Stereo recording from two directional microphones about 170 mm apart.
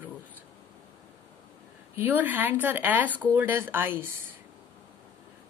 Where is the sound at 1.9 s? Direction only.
10° right (ahead or behind).